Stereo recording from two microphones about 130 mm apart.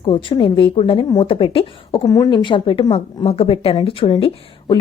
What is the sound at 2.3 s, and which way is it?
A woman's voice, 40° left (ahead or behind).